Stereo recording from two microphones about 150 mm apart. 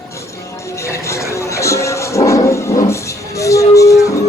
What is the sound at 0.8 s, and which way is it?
Music, 20° left (ahead or behind).